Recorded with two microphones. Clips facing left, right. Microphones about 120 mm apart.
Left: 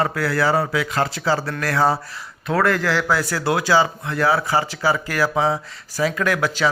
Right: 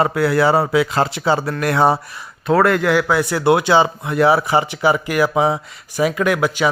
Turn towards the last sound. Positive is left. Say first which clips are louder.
# right 4 dB
turn(degrees=-15)  # may be behind; listen again after turning